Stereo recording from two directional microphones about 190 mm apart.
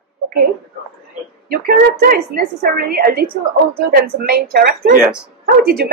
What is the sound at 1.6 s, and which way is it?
Speech, 50° right (ahead or behind).